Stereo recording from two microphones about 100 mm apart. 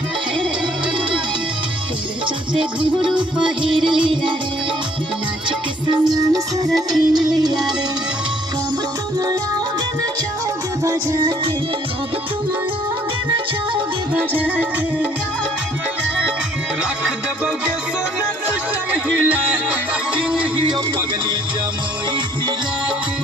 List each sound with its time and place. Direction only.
3.0 s music: 5° right (ahead or behind)
3.6 s music: 55° right (ahead or behind)
5.5 s music: 50° right (ahead or behind)
6.1 s music: 35° right (ahead or behind)
6.7 s music: centre (ahead or behind)
7.1 s music: 45° right (ahead or behind)
11.2 s music: 50° right (ahead or behind)
14.1 s music: 15° right (ahead or behind)
19.0 s music: 15° right (ahead or behind)